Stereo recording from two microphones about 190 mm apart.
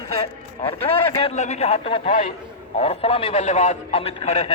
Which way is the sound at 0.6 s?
30° left (ahead or behind).